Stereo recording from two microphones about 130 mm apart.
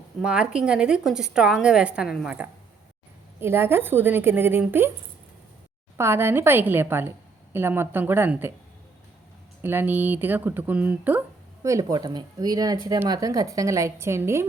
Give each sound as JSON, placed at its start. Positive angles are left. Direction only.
{"t": 0.2, "sound": "speech", "side_deg": -5}
{"t": 6.0, "sound": "speech", "side_deg": -20}
{"t": 9.6, "sound": "speech", "side_deg": -15}
{"t": 11.6, "sound": "a woman's voice", "side_deg": -25}